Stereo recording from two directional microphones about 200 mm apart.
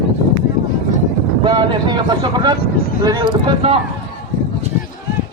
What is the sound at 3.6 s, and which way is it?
Speech, 30° right (ahead or behind).